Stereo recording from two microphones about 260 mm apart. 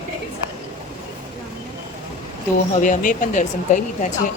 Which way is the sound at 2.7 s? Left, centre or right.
Left.